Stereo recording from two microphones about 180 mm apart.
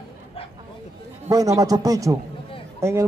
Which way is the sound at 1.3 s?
20° right (ahead or behind).